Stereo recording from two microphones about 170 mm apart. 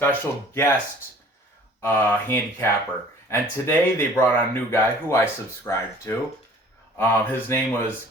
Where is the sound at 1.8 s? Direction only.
15° left (ahead or behind).